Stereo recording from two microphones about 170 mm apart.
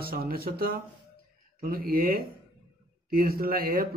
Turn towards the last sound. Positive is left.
turn(degrees=-60)  # may be behind; listen again after turning